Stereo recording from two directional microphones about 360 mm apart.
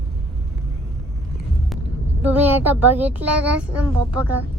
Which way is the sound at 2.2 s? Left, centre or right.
Centre.